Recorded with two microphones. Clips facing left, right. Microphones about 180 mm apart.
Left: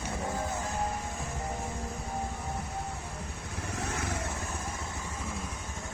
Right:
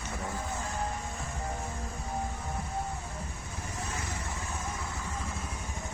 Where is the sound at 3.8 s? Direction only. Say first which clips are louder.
Left 4 dB; 65° left (ahead or behind).